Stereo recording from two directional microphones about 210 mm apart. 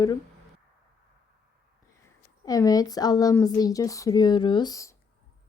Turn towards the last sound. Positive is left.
turn(degrees=15)  # may be behind; listen again after turning